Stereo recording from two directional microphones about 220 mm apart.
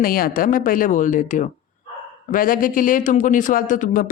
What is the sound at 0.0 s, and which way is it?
Speech, 40° left (ahead or behind).